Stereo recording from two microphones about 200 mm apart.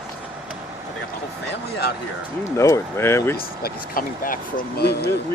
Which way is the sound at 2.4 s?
15° left (ahead or behind).